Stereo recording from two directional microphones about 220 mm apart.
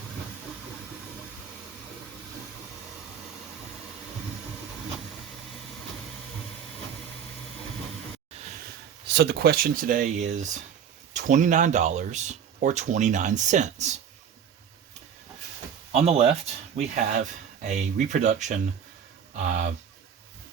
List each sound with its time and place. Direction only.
9.1 s speech: 45° right (ahead or behind)
15.9 s speech: 30° right (ahead or behind)